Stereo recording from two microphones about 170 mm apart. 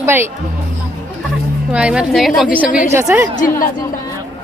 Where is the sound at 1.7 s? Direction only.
5° right (ahead or behind).